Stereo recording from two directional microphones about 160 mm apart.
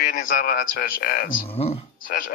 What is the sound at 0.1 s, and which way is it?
Speech, 60° left (ahead or behind).